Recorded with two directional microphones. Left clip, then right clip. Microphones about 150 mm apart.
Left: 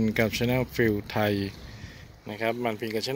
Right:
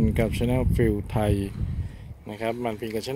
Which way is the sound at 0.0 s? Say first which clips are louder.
Even; 10° right (ahead or behind).